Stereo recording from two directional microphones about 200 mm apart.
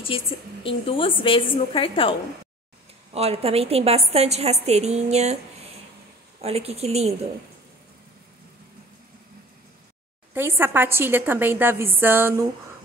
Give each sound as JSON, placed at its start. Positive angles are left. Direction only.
{"t": 0.0, "sound": "a woman's voice", "side_deg": 25}
{"t": 3.1, "sound": "a woman's voice", "side_deg": -30}
{"t": 6.4, "sound": "a woman's voice", "side_deg": -30}
{"t": 10.3, "sound": "a woman's voice", "side_deg": -10}